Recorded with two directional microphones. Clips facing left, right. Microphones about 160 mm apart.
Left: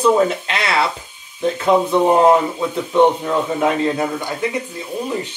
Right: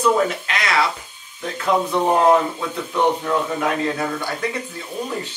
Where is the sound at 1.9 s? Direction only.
15° left (ahead or behind).